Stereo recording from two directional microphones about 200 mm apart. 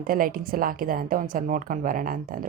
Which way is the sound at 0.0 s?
45° right (ahead or behind).